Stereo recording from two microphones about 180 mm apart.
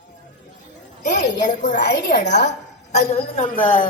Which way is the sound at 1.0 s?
45° left (ahead or behind).